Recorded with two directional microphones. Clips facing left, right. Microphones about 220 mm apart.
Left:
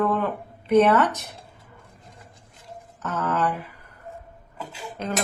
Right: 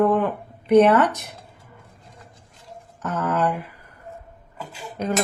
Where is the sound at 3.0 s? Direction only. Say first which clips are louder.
Right 2 dB; 15° right (ahead or behind).